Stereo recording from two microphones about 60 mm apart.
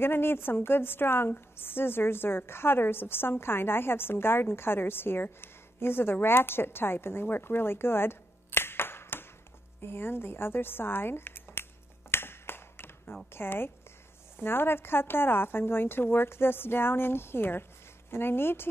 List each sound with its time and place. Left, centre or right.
0.0 s a woman's voice: left
12.1 s finger snapping: left
13.3 s a woman's voice: left